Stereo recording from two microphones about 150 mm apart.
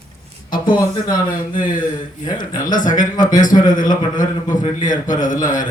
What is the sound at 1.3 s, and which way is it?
Speech, 65° left (ahead or behind).